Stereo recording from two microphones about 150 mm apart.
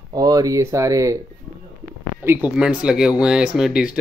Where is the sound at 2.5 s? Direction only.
5° right (ahead or behind).